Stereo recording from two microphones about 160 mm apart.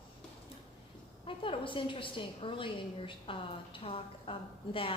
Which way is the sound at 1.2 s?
35° left (ahead or behind).